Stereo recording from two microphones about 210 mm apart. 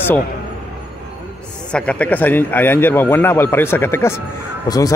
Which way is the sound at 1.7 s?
5° left (ahead or behind).